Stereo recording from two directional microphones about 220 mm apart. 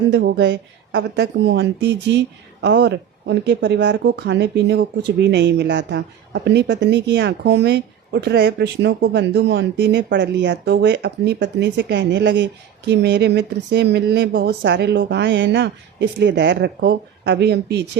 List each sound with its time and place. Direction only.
0.1 s speech: 50° right (ahead or behind)